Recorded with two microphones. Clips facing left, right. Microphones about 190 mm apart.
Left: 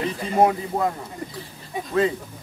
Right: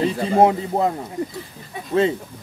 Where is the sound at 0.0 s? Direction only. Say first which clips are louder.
Right 4 dB; 25° right (ahead or behind).